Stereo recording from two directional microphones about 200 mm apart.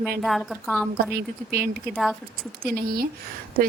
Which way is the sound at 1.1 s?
50° right (ahead or behind).